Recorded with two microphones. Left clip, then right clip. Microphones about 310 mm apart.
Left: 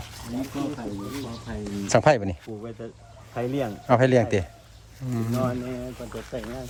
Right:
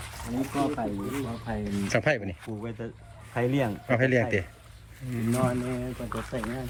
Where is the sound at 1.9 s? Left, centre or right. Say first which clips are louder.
Left 7 dB; centre.